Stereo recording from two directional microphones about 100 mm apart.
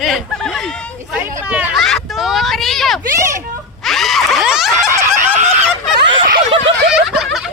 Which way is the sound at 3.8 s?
Centre (ahead or behind).